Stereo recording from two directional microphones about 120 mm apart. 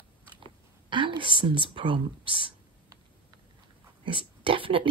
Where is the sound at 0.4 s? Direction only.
45° right (ahead or behind).